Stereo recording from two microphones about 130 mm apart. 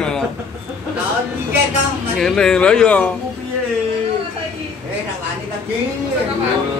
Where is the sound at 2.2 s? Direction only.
5° left (ahead or behind).